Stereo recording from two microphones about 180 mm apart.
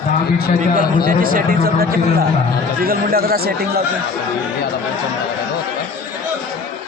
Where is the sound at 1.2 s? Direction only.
50° right (ahead or behind).